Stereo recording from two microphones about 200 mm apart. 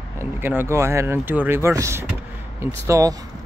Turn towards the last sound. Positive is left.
turn(degrees=-15)  # may be behind; listen again after turning